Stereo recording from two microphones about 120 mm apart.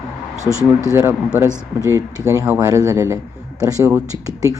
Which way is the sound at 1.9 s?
25° right (ahead or behind).